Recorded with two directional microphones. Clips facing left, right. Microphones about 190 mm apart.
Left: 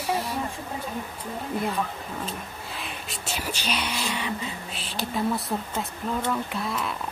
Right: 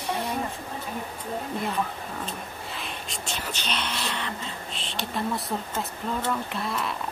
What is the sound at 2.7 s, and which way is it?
Speech, centre (ahead or behind).